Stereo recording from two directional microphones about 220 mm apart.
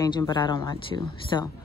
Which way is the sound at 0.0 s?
15° left (ahead or behind).